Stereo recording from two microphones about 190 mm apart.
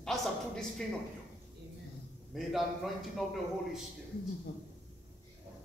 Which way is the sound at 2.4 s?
Centre (ahead or behind).